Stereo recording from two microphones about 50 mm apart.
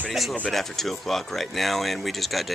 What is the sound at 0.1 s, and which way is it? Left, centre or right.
Speech, centre.